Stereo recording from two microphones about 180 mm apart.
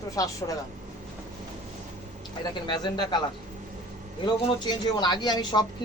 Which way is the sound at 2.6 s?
25° left (ahead or behind).